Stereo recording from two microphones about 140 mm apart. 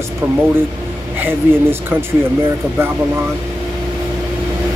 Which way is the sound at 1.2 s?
15° right (ahead or behind).